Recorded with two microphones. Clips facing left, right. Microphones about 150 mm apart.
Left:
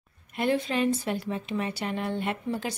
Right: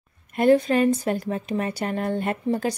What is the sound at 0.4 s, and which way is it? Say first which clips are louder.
A woman's voice: right 8 dB; 45° right (ahead or behind).